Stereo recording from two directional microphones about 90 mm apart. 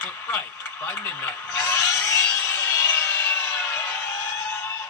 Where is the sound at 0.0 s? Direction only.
25° left (ahead or behind).